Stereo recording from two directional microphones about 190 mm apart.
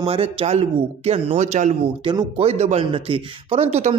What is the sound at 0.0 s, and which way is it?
Speech, 30° right (ahead or behind).